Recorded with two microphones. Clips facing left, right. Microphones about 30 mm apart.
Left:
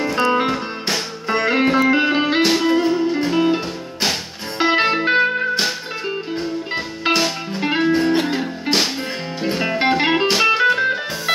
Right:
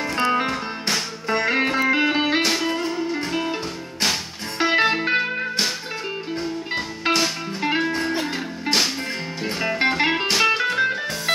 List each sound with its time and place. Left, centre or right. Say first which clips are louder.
0.3 s music: left 3 dB; centre